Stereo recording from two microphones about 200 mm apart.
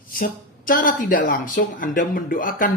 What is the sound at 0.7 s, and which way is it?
Speech, 45° left (ahead or behind).